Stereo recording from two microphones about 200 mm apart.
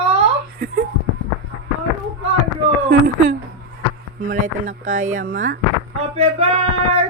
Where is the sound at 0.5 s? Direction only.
50° right (ahead or behind).